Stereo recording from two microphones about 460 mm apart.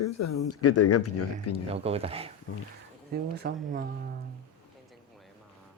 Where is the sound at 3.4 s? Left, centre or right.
Centre.